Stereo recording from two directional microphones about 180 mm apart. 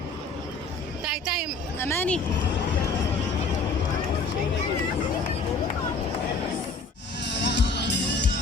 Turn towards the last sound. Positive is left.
turn(degrees=75)  # may be behind; listen again after turning